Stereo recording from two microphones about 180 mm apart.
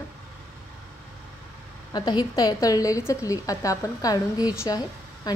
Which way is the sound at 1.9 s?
20° left (ahead or behind).